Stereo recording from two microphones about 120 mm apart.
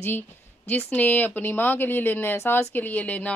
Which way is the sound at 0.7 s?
15° left (ahead or behind).